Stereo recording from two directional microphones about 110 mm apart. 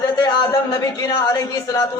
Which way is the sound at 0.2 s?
30° left (ahead or behind).